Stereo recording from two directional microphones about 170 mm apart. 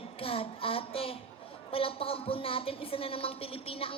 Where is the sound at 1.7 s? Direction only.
35° left (ahead or behind).